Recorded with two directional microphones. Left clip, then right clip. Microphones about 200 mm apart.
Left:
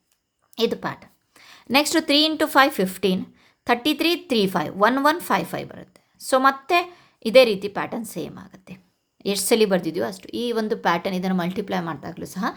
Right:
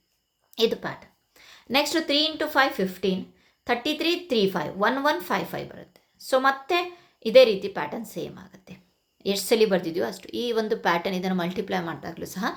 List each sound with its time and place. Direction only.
0.5 s a woman's voice: 30° left (ahead or behind)